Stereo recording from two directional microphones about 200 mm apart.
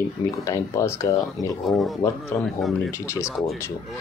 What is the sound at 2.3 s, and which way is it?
Speech, 10° left (ahead or behind).